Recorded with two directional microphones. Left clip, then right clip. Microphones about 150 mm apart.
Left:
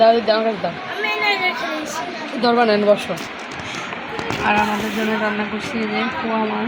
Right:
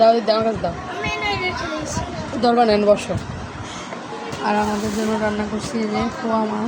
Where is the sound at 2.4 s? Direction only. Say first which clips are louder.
Even; 15° right (ahead or behind).